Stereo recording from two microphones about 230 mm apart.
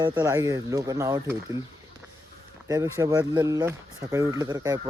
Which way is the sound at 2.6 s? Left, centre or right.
Centre.